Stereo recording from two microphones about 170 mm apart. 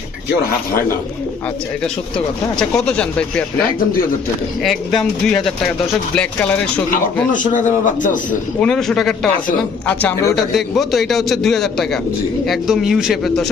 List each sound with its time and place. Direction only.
1.8 s a man's voice: 5° left (ahead or behind)
4.6 s a man's voice: centre (ahead or behind)
7.3 s a man's voice: 50° left (ahead or behind)
8.6 s a man's voice: 5° left (ahead or behind)